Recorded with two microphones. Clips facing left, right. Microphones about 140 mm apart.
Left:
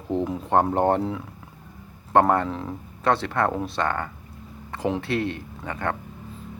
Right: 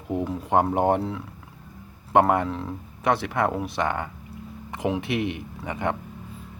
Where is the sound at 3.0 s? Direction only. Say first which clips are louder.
Left 1 dB; 10° right (ahead or behind).